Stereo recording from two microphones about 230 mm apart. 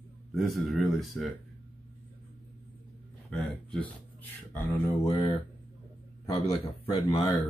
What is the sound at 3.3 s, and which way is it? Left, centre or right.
Speech, centre.